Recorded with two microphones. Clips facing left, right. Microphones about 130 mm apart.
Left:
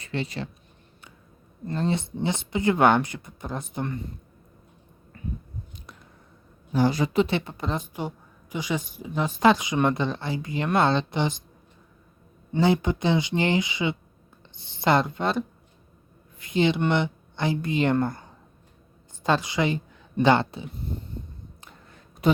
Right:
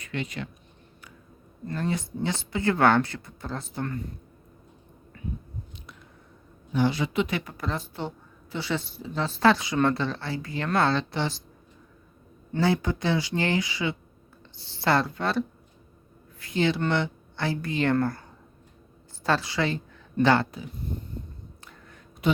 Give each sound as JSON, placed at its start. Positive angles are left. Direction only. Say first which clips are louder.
{"t": 0.0, "sound": "speech", "louder": "left 2 dB", "side_deg": 30}
{"t": 1.6, "sound": "a woman's voice", "louder": "left 3 dB", "side_deg": 25}
{"t": 6.7, "sound": "a woman's voice", "louder": "left 3 dB", "side_deg": 40}
{"t": 12.5, "sound": "a woman's voice", "louder": "left 3 dB", "side_deg": 15}
{"t": 22.2, "sound": "speech", "louder": "left 3 dB", "side_deg": 40}